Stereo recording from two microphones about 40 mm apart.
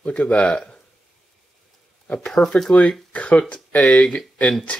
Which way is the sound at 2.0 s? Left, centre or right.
Left.